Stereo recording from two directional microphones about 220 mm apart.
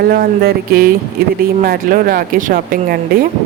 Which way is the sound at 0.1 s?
45° right (ahead or behind).